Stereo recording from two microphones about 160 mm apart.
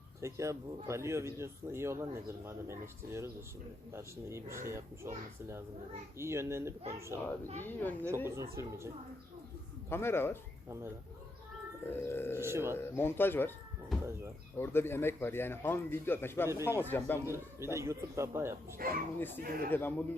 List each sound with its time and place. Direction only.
0.2 s speech: 20° right (ahead or behind)
7.6 s speech: 10° left (ahead or behind)
8.0 s speech: 15° right (ahead or behind)
9.9 s speech: 15° left (ahead or behind)
12.0 s speech: 15° left (ahead or behind)
12.4 s speech: 15° right (ahead or behind)
12.9 s speech: 15° left (ahead or behind)
13.9 s bird: centre (ahead or behind)
14.5 s speech: 15° left (ahead or behind)
16.5 s speech: 15° right (ahead or behind)
16.8 s speech: 10° left (ahead or behind)
17.2 s speech: 15° right (ahead or behind)
18.8 s speech: 65° right (ahead or behind)
19.7 s speech: 10° left (ahead or behind)